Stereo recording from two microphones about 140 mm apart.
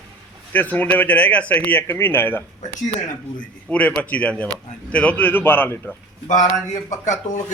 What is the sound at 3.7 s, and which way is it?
Speech, 10° left (ahead or behind).